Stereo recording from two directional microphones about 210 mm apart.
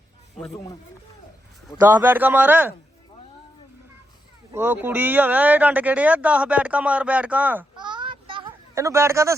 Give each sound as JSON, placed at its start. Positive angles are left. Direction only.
{"t": 1.9, "sound": "speech", "side_deg": -10}
{"t": 4.5, "sound": "speech", "side_deg": -10}
{"t": 7.8, "sound": "a sound", "side_deg": -20}